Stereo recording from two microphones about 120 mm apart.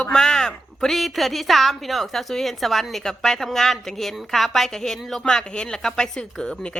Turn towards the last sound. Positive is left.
turn(degrees=5)  # may be behind; listen again after turning